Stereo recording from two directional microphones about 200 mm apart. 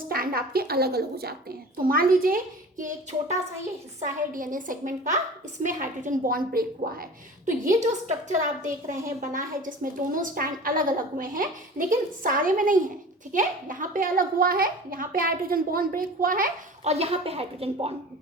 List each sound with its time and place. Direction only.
0.1 s a woman's voice: 45° right (ahead or behind); by 17.9 s 30° right (ahead or behind)